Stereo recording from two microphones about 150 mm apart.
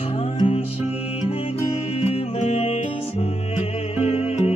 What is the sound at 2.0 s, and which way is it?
Music, 50° left (ahead or behind).